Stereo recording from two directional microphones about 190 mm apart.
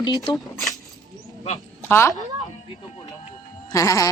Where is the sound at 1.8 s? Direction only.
10° left (ahead or behind).